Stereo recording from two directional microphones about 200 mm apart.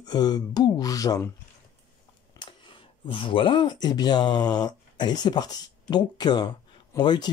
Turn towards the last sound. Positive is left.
turn(degrees=20)  # may be behind; listen again after turning